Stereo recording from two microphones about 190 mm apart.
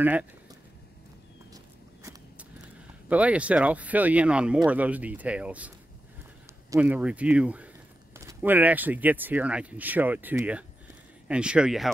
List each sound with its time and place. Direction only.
0.0 s speech: 10° right (ahead or behind)
3.1 s speech: 5° right (ahead or behind)
6.7 s speech: 10° right (ahead or behind)